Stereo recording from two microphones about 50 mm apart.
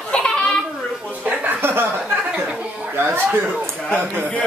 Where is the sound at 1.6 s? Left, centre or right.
Right.